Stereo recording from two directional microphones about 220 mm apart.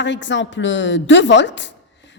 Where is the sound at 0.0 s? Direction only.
55° left (ahead or behind).